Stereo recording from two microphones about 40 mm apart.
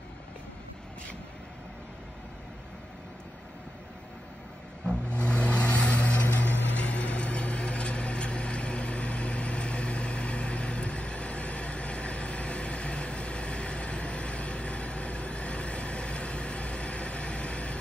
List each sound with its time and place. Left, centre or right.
5.1 s vehicle: left
6.2 s vehicle: left
6.8 s vehicle: left